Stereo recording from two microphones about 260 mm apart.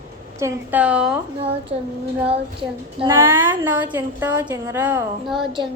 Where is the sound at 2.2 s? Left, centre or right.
Right.